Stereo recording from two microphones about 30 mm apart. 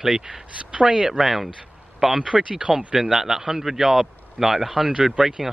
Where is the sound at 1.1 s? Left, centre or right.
Centre.